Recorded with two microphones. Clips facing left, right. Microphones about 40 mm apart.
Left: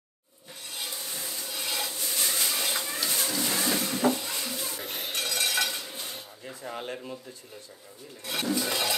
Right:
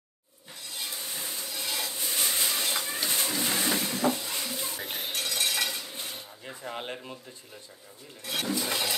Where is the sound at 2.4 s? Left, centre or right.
Centre.